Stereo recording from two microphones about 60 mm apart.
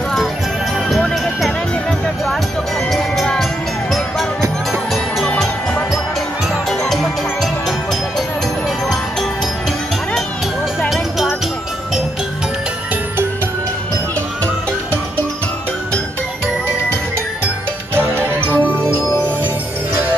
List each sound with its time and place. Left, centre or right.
2.9 s music: centre
10.9 s music: centre
17.9 s music: right
18.4 s music: left